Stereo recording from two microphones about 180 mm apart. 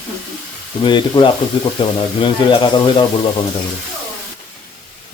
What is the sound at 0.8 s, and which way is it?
Speech, 25° left (ahead or behind).